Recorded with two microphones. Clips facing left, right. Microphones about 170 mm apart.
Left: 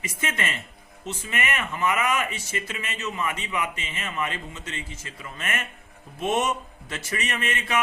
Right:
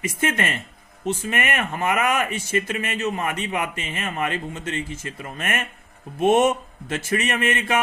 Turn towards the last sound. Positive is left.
turn(degrees=-50)  # may be behind; listen again after turning